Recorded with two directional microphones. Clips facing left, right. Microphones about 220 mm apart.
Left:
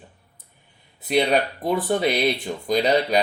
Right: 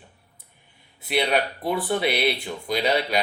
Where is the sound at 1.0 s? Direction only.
40° left (ahead or behind).